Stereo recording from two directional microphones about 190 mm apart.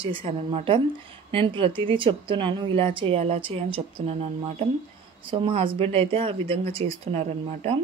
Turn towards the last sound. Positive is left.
turn(degrees=-30)  # may be behind; listen again after turning